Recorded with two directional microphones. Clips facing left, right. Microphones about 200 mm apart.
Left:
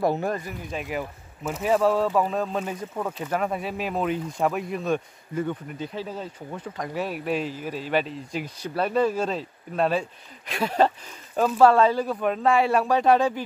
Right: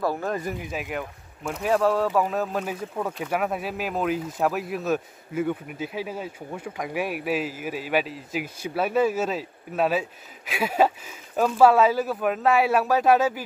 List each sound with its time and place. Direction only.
0.0 s speech: 20° left (ahead or behind)
0.3 s speech: centre (ahead or behind)